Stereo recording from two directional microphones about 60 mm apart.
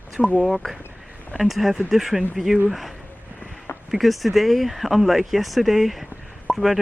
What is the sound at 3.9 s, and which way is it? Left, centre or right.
Speech, centre.